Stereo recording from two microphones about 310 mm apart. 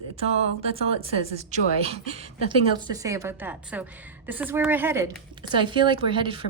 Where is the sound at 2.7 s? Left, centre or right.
Centre.